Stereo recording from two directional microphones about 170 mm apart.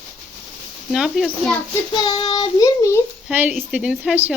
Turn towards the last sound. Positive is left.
turn(degrees=-5)  # may be behind; listen again after turning